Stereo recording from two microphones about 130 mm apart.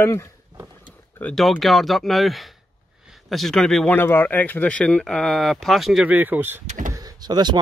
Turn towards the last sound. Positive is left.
turn(degrees=-35)  # may be behind; listen again after turning